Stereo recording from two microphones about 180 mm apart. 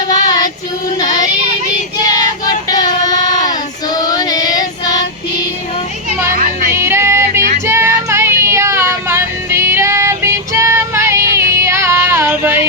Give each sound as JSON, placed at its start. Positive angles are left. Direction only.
{"t": 0.1, "sound": "child singing", "side_deg": 20}
{"t": 6.7, "sound": "music", "side_deg": -15}